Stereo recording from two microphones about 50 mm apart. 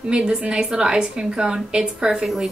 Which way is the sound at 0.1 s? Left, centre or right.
Centre.